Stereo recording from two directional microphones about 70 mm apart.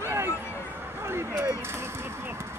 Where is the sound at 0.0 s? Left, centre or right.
Right.